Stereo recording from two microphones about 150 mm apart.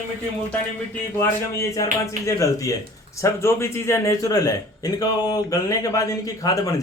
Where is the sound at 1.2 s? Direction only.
20° left (ahead or behind).